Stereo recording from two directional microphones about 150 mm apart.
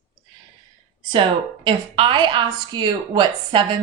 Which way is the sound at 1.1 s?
35° right (ahead or behind).